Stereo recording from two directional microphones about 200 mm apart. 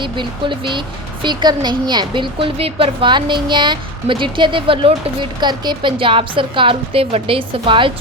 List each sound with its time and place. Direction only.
0.0 s a woman's voice: 25° right (ahead or behind)